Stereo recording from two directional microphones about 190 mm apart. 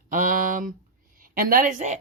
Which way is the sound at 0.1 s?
45° right (ahead or behind).